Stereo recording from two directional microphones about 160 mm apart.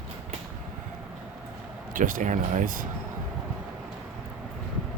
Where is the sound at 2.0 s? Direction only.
55° right (ahead or behind).